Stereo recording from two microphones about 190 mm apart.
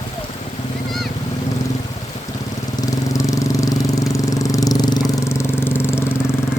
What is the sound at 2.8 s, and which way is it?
Vehicle, 15° left (ahead or behind).